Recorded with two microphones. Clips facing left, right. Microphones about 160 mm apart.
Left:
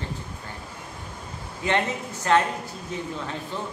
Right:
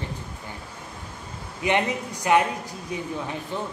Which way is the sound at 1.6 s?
15° right (ahead or behind).